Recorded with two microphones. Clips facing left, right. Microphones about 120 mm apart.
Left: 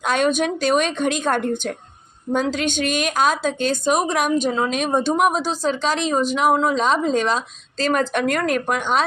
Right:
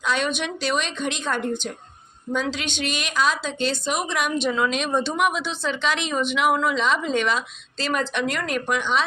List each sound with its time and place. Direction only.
0.0 s a woman's voice: 50° left (ahead or behind)